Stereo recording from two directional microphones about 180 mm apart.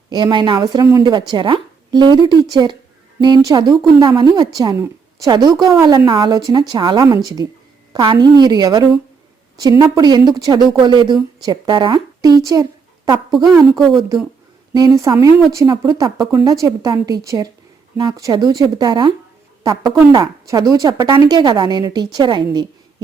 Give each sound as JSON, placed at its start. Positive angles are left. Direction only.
{"t": 0.1, "sound": "a woman's voice", "side_deg": -25}
{"t": 13.3, "sound": "a woman's voice", "side_deg": 0}
{"t": 13.6, "sound": "a woman's voice", "side_deg": -15}